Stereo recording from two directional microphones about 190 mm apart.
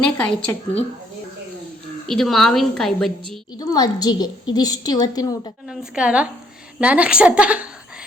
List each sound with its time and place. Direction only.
0.0 s a woman's voice: 5° left (ahead or behind)
2.0 s a woman's voice: centre (ahead or behind)
3.6 s a woman's voice: 20° left (ahead or behind)
5.6 s a woman's voice: 5° right (ahead or behind)